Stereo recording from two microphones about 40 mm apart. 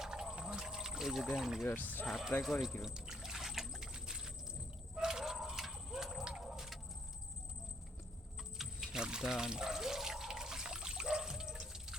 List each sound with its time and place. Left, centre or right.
0.0 s whale vocalization: centre
0.4 s a sound: centre
1.6 s speech: left
2.4 s speech: centre
2.8 s trickle: centre
4.9 s a sound: centre
8.5 s water: centre